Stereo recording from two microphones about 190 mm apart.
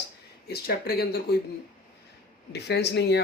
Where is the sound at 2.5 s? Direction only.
60° left (ahead or behind).